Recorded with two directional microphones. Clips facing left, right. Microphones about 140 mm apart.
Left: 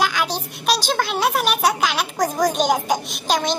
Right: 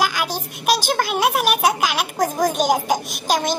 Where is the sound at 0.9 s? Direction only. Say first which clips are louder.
Right 1 dB; 10° right (ahead or behind).